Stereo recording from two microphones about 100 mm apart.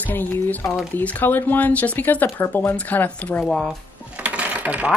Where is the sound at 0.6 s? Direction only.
5° right (ahead or behind).